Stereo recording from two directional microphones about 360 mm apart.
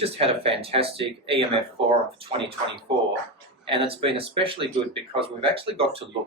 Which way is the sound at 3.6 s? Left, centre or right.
Centre.